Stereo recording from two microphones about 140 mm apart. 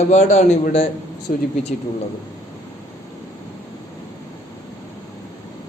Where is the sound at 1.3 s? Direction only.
70° left (ahead or behind).